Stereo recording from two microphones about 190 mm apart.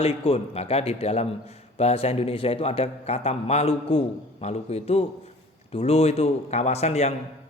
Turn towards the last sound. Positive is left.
turn(degrees=35)  # may be behind; listen again after turning